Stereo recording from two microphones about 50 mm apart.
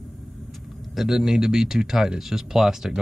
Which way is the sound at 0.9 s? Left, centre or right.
Centre.